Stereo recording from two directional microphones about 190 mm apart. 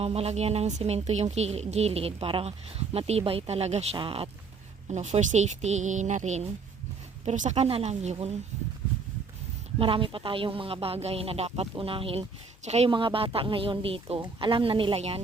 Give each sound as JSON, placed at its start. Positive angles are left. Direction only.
{"t": 0.0, "sound": "a woman's voice", "side_deg": -30}
{"t": 9.7, "sound": "speech", "side_deg": -30}